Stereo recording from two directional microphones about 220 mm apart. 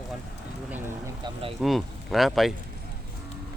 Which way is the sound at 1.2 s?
25° right (ahead or behind).